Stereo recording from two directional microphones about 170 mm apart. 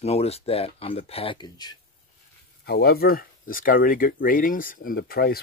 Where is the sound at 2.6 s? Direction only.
65° left (ahead or behind).